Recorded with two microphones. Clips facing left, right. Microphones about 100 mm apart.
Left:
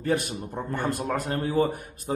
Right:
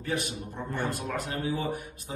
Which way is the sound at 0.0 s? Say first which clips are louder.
Left 6 dB; 50° left (ahead or behind).